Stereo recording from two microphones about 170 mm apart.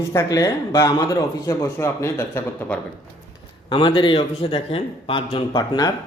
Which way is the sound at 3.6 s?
30° left (ahead or behind).